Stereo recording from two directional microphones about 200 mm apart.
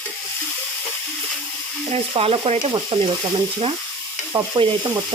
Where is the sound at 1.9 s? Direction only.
30° right (ahead or behind).